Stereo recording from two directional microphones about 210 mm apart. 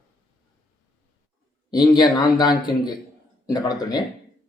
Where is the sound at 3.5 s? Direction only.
20° left (ahead or behind).